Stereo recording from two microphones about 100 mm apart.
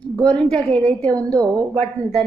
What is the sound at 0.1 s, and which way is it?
A woman's voice, 10° left (ahead or behind).